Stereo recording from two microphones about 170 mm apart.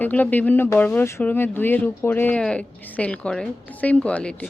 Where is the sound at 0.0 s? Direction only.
10° left (ahead or behind).